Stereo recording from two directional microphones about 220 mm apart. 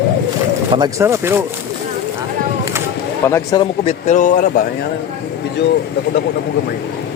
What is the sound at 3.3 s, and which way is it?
A man's voice, 15° left (ahead or behind).